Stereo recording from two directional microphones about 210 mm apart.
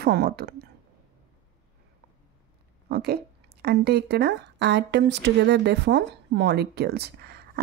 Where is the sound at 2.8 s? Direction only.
50° right (ahead or behind).